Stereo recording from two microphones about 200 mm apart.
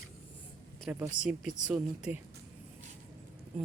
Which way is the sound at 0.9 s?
5° right (ahead or behind).